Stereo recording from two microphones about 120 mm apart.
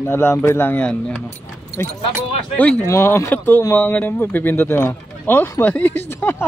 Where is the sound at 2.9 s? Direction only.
25° left (ahead or behind).